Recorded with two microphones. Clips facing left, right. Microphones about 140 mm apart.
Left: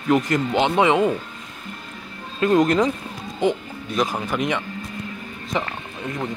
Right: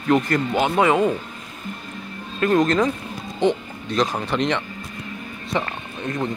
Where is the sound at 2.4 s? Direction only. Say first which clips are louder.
Left 1 dB; 15° left (ahead or behind).